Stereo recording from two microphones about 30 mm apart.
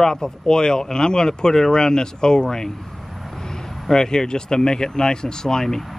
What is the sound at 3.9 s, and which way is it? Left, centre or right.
Speech, left.